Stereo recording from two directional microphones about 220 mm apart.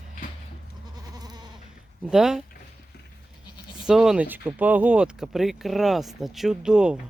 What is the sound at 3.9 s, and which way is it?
Speech, centre (ahead or behind).